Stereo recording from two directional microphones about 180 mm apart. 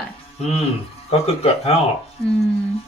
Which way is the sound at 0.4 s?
35° left (ahead or behind).